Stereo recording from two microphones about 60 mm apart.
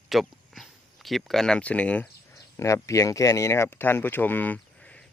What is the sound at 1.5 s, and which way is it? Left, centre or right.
Speech, left.